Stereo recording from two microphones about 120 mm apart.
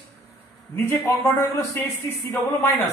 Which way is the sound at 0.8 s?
25° left (ahead or behind).